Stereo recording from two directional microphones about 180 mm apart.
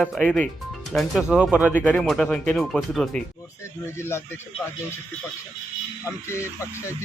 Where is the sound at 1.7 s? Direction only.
10° left (ahead or behind).